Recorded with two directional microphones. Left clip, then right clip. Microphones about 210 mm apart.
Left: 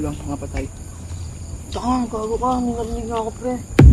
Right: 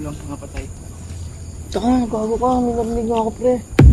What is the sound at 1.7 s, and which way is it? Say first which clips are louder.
Speech: right 3 dB; 20° right (ahead or behind).